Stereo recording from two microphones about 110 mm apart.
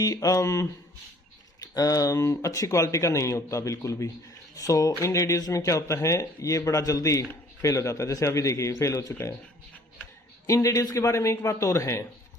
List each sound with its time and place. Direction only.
0.0 s speech: 30° left (ahead or behind)
10.4 s speech: 30° left (ahead or behind)